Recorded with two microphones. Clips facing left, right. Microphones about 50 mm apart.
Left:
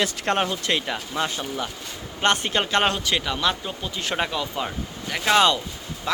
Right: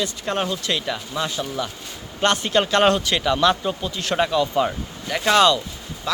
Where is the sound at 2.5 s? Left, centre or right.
Centre.